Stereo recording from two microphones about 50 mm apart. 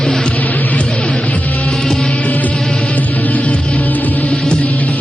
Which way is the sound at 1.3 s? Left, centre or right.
Left.